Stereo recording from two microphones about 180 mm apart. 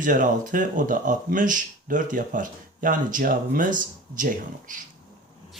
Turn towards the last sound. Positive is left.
turn(degrees=-45)  # may be behind; listen again after turning